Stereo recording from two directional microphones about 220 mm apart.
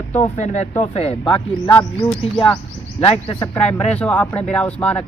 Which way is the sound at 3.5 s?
5° left (ahead or behind).